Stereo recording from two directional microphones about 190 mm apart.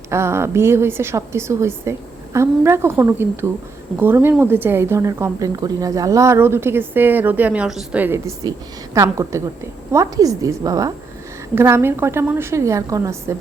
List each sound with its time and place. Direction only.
0.1 s a woman's voice: 15° right (ahead or behind)
8.4 s a woman's voice: 20° right (ahead or behind)